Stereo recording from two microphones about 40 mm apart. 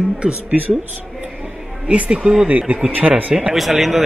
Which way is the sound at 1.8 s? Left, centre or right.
Right.